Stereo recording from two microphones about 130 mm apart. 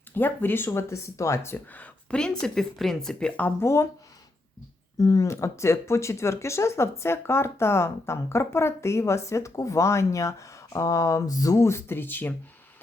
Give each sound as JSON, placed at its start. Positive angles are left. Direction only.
{"t": 0.1, "sound": "speech", "side_deg": 15}
{"t": 4.9, "sound": "speech", "side_deg": 25}